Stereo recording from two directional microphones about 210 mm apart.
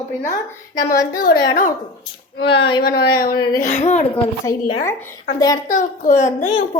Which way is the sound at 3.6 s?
35° left (ahead or behind).